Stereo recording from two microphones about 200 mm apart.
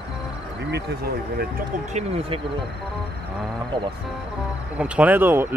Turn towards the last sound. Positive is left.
turn(degrees=-10)  # may be behind; listen again after turning